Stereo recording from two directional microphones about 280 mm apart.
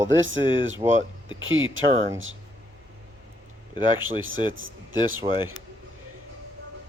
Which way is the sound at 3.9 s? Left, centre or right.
Centre.